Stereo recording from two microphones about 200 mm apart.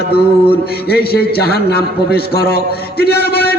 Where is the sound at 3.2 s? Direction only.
50° left (ahead or behind).